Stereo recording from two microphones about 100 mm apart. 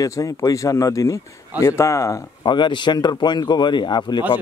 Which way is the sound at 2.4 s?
50° left (ahead or behind).